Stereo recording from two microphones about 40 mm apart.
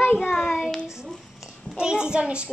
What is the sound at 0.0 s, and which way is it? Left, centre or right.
Child singing, left.